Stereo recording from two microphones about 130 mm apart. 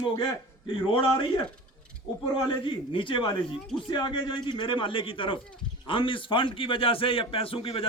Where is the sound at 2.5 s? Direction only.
40° left (ahead or behind).